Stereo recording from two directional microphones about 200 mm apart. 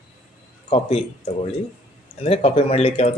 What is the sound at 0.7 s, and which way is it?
Speech, 30° left (ahead or behind).